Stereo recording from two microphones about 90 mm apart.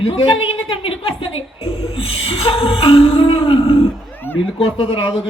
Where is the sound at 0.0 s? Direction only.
90° left.